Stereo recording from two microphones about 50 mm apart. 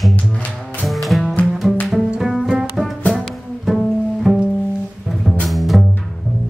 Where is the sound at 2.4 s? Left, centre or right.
Centre.